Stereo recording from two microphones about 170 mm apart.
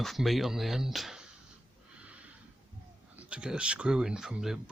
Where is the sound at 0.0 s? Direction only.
Centre (ahead or behind).